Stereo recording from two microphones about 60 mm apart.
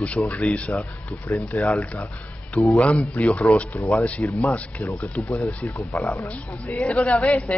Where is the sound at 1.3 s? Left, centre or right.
Left.